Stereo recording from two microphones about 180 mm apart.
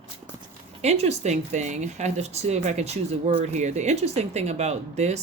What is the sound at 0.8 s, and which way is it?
Speech, 35° right (ahead or behind).